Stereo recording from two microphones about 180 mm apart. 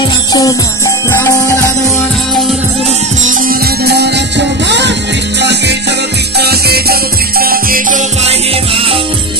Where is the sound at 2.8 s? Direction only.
40° right (ahead or behind).